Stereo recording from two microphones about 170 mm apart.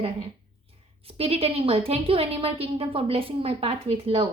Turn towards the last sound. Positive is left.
turn(degrees=-30)  # may be behind; listen again after turning